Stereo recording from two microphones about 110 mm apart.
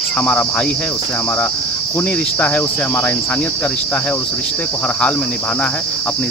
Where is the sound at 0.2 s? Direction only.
15° left (ahead or behind).